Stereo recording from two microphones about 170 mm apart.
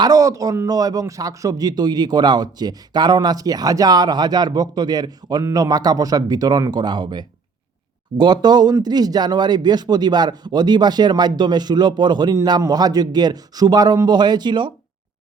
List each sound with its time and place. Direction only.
0.0 s a man's voice: 20° right (ahead or behind)